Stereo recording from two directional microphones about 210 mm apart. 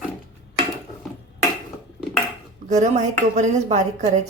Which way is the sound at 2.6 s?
35° right (ahead or behind).